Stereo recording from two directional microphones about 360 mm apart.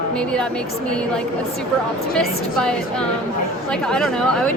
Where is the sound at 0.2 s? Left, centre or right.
Centre.